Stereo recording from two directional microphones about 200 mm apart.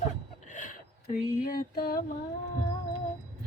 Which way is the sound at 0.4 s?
40° left (ahead or behind).